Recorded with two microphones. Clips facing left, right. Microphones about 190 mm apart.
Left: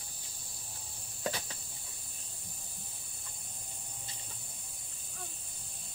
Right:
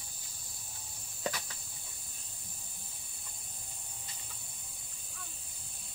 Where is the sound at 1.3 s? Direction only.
30° left (ahead or behind).